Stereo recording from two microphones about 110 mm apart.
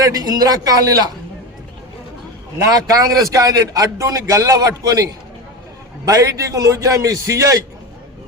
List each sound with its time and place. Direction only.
0.0 s a man's voice: 35° right (ahead or behind)
2.6 s a man's voice: 35° right (ahead or behind)
6.1 s a man's voice: 30° right (ahead or behind)